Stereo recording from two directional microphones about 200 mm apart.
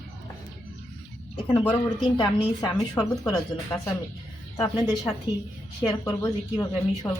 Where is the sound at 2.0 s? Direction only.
20° left (ahead or behind).